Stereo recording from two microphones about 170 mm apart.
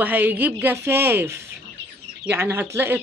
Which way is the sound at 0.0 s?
10° right (ahead or behind).